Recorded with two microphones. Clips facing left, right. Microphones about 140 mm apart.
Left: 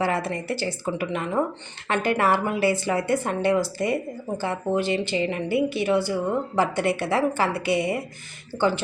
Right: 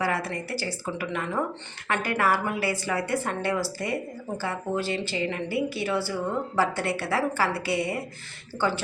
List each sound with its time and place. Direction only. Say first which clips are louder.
0.0 s a woman's voice: left 3 dB; 25° left (ahead or behind)